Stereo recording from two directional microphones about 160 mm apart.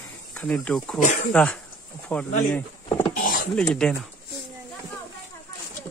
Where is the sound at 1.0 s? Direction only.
50° left (ahead or behind).